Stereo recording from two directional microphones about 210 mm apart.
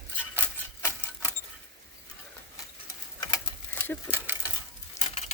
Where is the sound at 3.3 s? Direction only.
10° left (ahead or behind).